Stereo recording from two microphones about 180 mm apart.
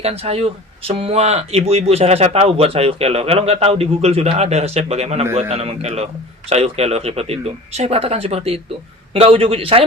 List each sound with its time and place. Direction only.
0.0 s speech: 35° right (ahead or behind)